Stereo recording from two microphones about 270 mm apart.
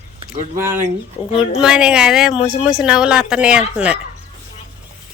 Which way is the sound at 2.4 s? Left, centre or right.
Centre.